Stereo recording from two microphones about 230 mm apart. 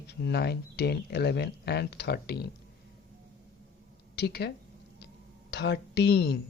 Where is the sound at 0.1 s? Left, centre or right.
Left.